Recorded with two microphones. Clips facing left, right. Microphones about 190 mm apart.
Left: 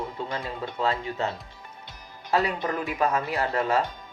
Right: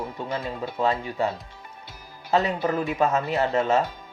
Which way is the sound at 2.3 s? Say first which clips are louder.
Right 3 dB; 25° right (ahead or behind).